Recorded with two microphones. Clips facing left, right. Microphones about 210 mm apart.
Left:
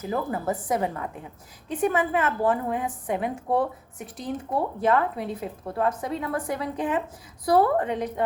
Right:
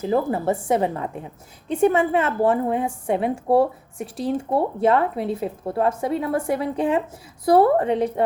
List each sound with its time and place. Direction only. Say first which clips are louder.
0.0 s speech: right 6 dB; 30° right (ahead or behind)